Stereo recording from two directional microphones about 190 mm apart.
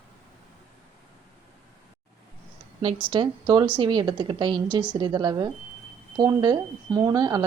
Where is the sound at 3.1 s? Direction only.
25° right (ahead or behind).